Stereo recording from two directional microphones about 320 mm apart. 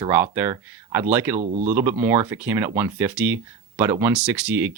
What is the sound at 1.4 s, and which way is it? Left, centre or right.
Speech, right.